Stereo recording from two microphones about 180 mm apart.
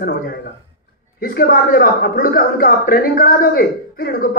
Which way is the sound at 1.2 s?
55° left (ahead or behind).